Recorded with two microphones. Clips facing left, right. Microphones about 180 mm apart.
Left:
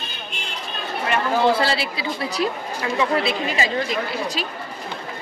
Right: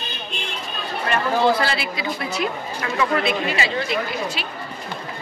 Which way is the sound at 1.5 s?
30° left (ahead or behind).